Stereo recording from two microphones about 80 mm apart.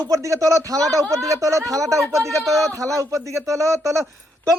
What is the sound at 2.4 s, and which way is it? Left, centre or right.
Speech, centre.